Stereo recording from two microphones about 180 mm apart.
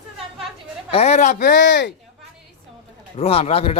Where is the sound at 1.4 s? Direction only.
75° left (ahead or behind).